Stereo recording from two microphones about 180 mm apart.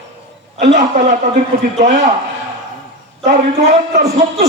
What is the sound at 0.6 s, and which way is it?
A man's voice, 40° right (ahead or behind).